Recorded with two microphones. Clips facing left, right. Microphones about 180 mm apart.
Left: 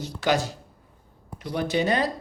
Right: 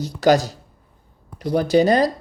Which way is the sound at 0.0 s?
40° right (ahead or behind).